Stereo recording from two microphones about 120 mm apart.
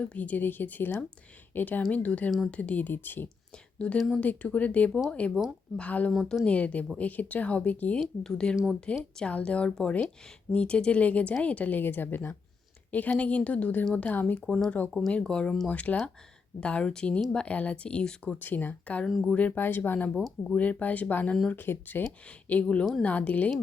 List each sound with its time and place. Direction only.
0.0 s a woman's voice: 10° left (ahead or behind)
4.9 s speech: 5° right (ahead or behind)
5.7 s a woman's voice: 10° left (ahead or behind)
6.1 s speech: centre (ahead or behind)
6.4 s a woman's voice: 10° left (ahead or behind)
19.0 s speech: centre (ahead or behind)
19.3 s a woman's voice: 10° left (ahead or behind)